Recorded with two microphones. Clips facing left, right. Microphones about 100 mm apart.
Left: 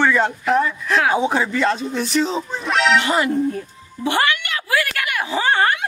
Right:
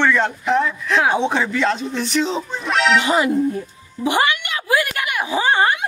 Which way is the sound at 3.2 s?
10° right (ahead or behind).